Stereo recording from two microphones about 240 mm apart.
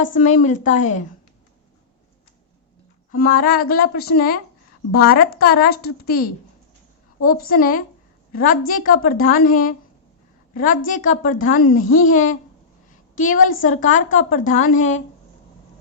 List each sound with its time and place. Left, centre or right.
0.0 s a woman's voice: left
3.1 s a woman's voice: left